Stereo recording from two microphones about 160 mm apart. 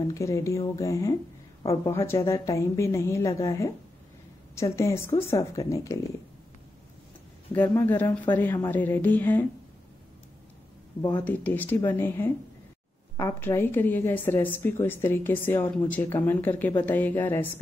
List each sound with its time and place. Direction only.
0.0 s a woman's voice: 20° left (ahead or behind)
7.5 s a woman's voice: 10° left (ahead or behind)
11.0 s a woman's voice: 25° left (ahead or behind)
11.2 s a woman's voice: 10° left (ahead or behind)